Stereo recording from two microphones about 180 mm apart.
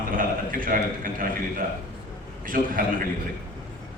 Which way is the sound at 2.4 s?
50° right (ahead or behind).